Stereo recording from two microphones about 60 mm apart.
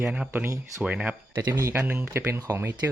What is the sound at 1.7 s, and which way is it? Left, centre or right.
Speech, right.